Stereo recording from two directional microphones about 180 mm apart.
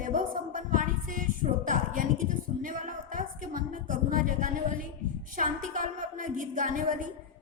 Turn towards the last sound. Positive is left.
turn(degrees=-45)  # may be behind; listen again after turning